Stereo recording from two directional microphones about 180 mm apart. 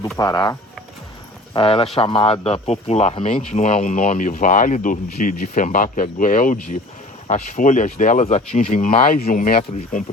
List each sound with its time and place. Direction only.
0.2 s speech: 20° left (ahead or behind)
1.5 s speech: 30° left (ahead or behind); by 10.0 s 50° left (ahead or behind)